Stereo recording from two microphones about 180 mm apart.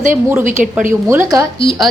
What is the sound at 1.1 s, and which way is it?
Speech, 15° right (ahead or behind).